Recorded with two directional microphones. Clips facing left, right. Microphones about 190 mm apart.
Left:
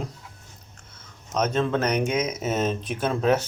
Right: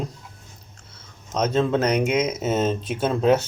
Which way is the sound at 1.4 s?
25° right (ahead or behind).